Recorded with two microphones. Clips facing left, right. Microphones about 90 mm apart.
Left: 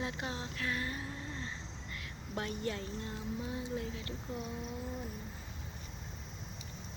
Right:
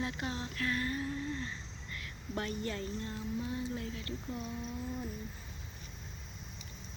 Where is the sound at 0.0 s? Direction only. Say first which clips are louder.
Right 1 dB; 20° left (ahead or behind).